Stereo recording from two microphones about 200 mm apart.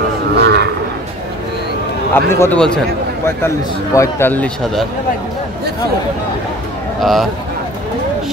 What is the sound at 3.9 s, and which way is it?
Speech, 15° left (ahead or behind).